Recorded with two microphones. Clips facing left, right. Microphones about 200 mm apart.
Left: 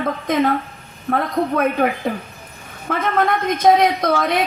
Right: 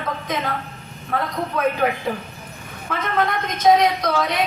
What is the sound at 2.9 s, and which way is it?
A woman's voice, 55° left (ahead or behind).